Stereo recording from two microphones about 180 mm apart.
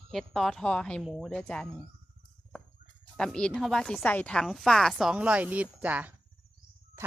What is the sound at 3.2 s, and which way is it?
Speech, 5° left (ahead or behind).